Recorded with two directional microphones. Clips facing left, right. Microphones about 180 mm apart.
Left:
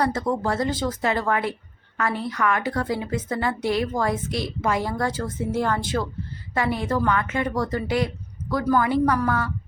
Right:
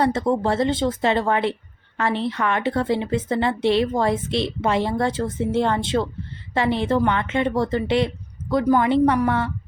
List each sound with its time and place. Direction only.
0.0 s a woman's voice: 25° right (ahead or behind)